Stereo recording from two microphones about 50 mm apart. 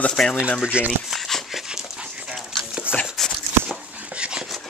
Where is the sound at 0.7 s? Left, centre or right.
Right.